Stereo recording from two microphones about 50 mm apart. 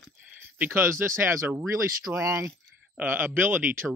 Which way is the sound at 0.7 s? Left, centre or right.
Right.